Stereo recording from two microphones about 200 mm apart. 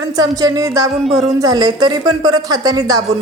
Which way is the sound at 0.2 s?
20° right (ahead or behind).